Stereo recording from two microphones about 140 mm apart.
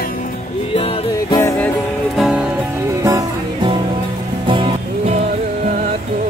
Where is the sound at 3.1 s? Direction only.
25° right (ahead or behind).